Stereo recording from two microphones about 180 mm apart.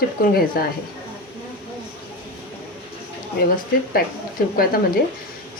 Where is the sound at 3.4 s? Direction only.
55° left (ahead or behind).